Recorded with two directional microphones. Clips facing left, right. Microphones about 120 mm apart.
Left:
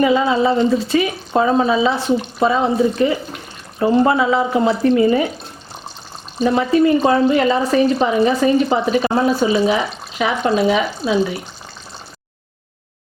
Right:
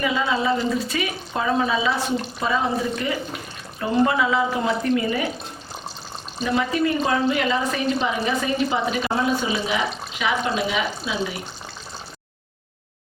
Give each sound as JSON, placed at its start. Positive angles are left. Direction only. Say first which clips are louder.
{"t": 0.0, "sound": "speech", "louder": "left 8 dB", "side_deg": 30}
{"t": 6.4, "sound": "speech", "louder": "left 8 dB", "side_deg": 35}